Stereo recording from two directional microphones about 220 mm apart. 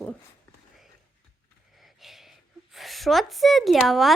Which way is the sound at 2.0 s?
Centre (ahead or behind).